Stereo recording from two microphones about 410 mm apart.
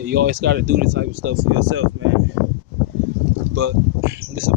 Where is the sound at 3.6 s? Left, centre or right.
Right.